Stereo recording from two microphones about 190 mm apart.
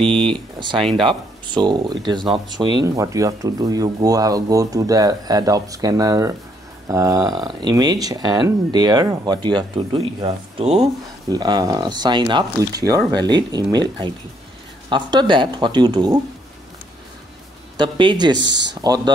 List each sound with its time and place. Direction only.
0.1 s a sound: 5° left (ahead or behind)
0.7 s speech: centre (ahead or behind)
1.0 s speech: 25° right (ahead or behind)
11.2 s speech: 20° right (ahead or behind)
17.7 s speech: 25° right (ahead or behind)
18.4 s speech: 70° right (ahead or behind)
18.8 s speech: 20° right (ahead or behind)